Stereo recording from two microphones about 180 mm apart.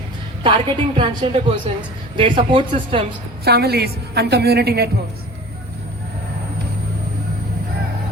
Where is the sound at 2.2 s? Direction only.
30° right (ahead or behind).